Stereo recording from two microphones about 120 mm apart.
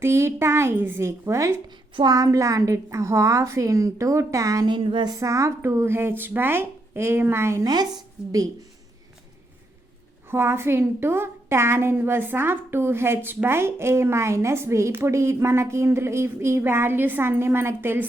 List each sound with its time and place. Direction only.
0.0 s a woman's voice: 20° right (ahead or behind); by 5.1 s 40° right (ahead or behind)
5.2 s a woman's voice: 25° right (ahead or behind)
10.3 s a woman's voice: 20° right (ahead or behind)